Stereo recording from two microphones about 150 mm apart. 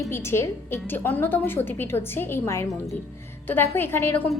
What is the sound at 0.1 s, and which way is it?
A woman's voice, 15° left (ahead or behind).